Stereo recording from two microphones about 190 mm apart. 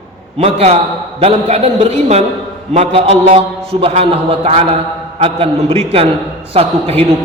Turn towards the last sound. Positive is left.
turn(degrees=-30)  # may be behind; listen again after turning